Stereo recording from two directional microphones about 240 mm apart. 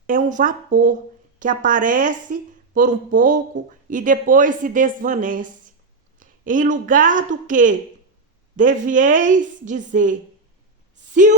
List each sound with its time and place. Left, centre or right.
0.1 s speech: right